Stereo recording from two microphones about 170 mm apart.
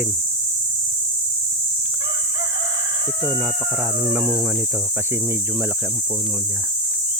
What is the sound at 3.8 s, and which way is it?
Speech, 15° right (ahead or behind).